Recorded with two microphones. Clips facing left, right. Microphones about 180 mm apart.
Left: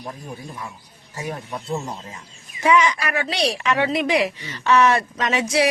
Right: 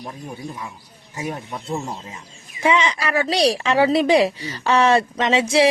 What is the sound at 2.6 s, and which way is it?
Speech, 25° right (ahead or behind).